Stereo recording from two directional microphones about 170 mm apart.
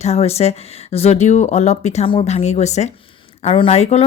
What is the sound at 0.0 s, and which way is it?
Speech, 40° left (ahead or behind).